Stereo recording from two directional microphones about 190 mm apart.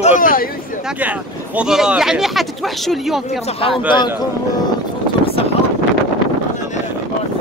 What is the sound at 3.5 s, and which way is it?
Speech, 30° left (ahead or behind).